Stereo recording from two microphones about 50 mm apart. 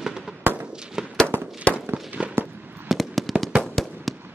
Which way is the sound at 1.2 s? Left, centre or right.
Right.